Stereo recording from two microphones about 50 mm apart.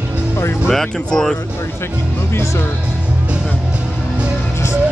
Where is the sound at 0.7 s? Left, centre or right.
Centre.